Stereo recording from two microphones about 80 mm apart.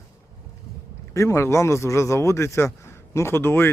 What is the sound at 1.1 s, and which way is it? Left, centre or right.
Speech, left.